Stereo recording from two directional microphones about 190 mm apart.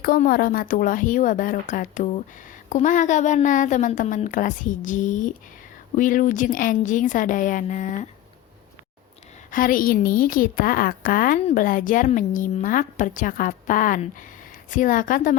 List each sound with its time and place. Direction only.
0.0 s a woman's voice: 50° left (ahead or behind)
9.5 s a woman's voice: 45° left (ahead or behind)